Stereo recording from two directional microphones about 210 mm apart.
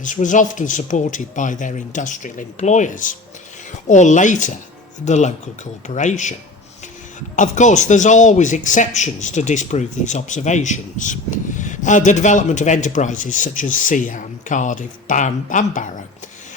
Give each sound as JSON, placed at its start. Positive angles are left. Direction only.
{"t": 0.0, "sound": "speech", "side_deg": 35}
{"t": 7.3, "sound": "speech", "side_deg": 35}